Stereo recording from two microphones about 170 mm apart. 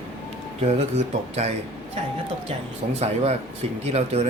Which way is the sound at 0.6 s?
40° right (ahead or behind).